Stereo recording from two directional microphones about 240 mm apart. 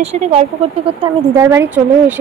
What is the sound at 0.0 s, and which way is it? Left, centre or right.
Speech, right.